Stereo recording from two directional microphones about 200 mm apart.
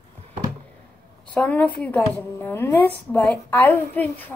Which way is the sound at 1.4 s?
5° left (ahead or behind).